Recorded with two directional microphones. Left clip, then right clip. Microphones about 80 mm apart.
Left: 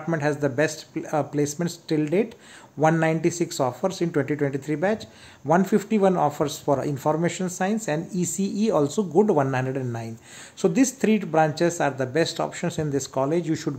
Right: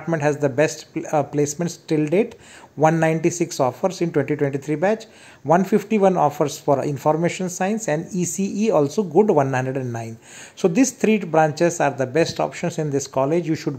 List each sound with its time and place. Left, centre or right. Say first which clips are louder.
0.2 s a man's voice: right 5 dB; right